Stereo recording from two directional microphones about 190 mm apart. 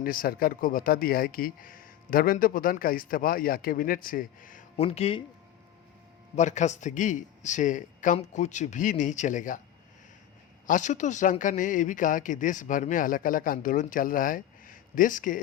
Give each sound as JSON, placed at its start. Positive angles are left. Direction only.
{"t": 0.0, "sound": "speech", "side_deg": 50}
{"t": 4.8, "sound": "speech", "side_deg": 30}
{"t": 6.3, "sound": "a man's voice", "side_deg": 40}
{"t": 10.7, "sound": "speech", "side_deg": 40}